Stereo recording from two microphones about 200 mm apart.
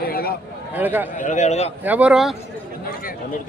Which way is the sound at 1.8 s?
5° right (ahead or behind).